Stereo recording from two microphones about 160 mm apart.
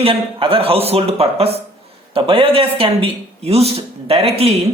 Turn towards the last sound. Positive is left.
turn(degrees=-40)  # may be behind; listen again after turning